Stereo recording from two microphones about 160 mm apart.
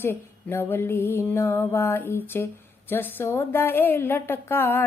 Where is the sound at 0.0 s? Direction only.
15° left (ahead or behind).